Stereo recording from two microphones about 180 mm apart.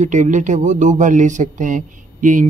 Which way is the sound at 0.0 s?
40° right (ahead or behind).